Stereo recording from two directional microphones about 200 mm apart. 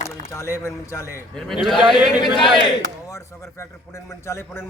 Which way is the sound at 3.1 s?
15° left (ahead or behind).